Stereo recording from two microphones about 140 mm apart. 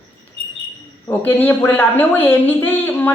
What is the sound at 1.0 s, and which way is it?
A woman's voice, 15° left (ahead or behind).